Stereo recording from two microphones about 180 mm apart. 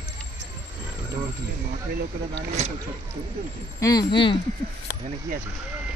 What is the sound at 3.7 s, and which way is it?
Speech, 20° left (ahead or behind).